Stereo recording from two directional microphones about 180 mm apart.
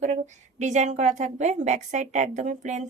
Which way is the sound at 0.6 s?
40° right (ahead or behind).